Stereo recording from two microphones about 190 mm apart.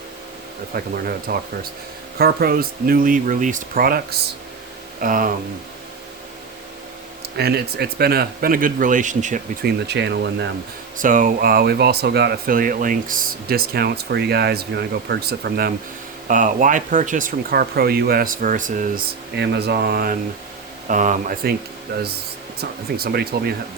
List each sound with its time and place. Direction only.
0.7 s speech: 50° right (ahead or behind)
7.3 s speech: 55° right (ahead or behind); by 9.4 s 40° right (ahead or behind)
9.6 s speech: 60° right (ahead or behind)
10.9 s speech: 45° right (ahead or behind)
16.3 s speech: 40° right (ahead or behind)
19.4 s speech: 60° right (ahead or behind); by 21.5 s 45° right (ahead or behind)
23.0 s speech: 55° right (ahead or behind)